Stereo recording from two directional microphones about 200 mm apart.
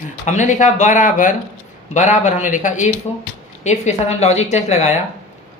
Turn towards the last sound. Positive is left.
turn(degrees=35)  # may be behind; listen again after turning